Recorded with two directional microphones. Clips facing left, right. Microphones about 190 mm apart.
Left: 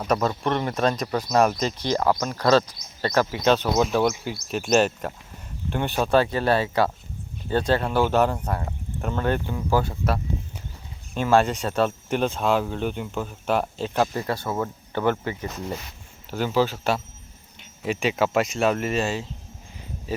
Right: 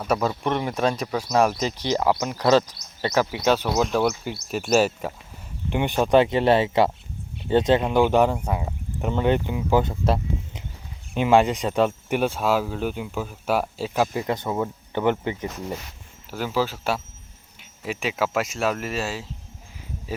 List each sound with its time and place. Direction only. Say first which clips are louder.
0.1 s speech: even; 5° right (ahead or behind)
16.3 s speech: left 2 dB; 5° right (ahead or behind)
20.1 s a sound: left 2 dB; 10° right (ahead or behind)